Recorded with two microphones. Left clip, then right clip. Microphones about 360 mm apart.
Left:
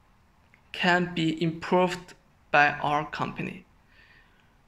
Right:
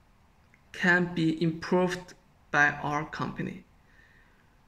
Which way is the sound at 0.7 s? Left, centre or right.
Centre.